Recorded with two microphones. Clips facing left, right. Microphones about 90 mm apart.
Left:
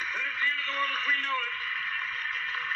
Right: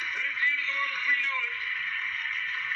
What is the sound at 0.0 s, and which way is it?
Radio, 45° left (ahead or behind).